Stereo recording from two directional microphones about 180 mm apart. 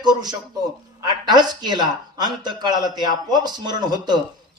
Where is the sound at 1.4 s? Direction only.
25° right (ahead or behind).